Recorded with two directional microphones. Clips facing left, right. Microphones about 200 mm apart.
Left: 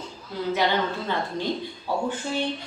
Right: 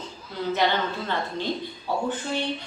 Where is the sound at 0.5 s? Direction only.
10° left (ahead or behind).